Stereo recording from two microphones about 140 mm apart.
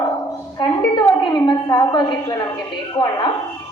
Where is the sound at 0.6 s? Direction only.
35° left (ahead or behind).